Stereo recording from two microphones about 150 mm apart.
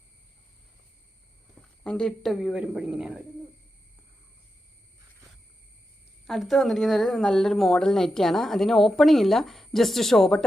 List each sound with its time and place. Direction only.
1.8 s speech: 5° left (ahead or behind)
6.2 s speech: centre (ahead or behind)